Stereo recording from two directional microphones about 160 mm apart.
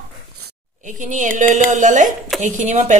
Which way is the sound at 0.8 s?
55° right (ahead or behind).